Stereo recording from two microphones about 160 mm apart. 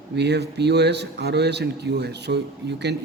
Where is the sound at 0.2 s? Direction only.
90° right.